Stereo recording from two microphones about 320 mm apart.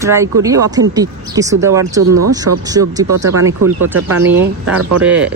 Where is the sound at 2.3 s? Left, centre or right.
Centre.